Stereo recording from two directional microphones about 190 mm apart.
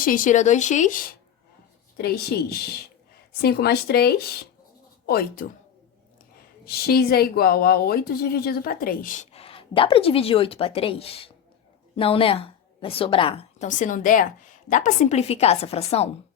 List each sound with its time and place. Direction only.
0.0 s a woman's voice: 45° left (ahead or behind)
2.0 s speech: 55° left (ahead or behind)
6.7 s a woman's voice: 55° left (ahead or behind); by 16.0 s 35° left (ahead or behind)